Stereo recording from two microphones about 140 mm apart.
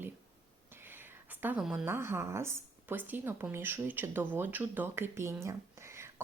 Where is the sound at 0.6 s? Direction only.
15° right (ahead or behind).